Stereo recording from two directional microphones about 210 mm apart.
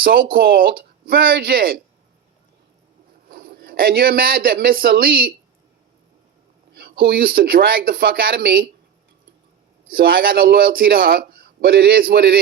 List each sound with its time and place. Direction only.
0.0 s a man's voice: 45° right (ahead or behind)
3.2 s speech: 45° right (ahead or behind)
6.7 s a man's voice: 45° right (ahead or behind)
9.9 s a man's voice: 45° right (ahead or behind)